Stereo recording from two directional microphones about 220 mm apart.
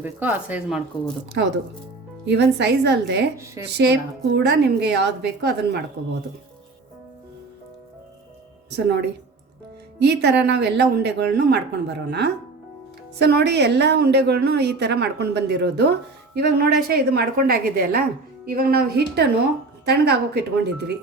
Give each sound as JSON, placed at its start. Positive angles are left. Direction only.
{"t": 0.0, "sound": "speech", "side_deg": -10}
{"t": 1.4, "sound": "a woman's voice", "side_deg": -50}
{"t": 8.7, "sound": "a woman's voice", "side_deg": -50}